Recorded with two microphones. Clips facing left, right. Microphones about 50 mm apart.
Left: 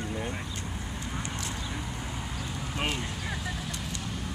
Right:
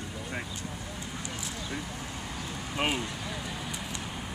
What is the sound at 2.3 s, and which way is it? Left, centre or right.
Vehicle, centre.